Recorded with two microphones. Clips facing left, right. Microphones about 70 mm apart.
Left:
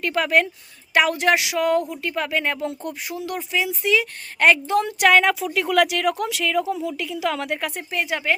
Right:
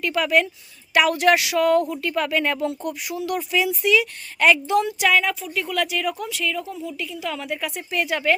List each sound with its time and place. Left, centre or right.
0.0 s a woman's voice: left
0.9 s speech: left
4.9 s a woman's voice: left
7.9 s speech: left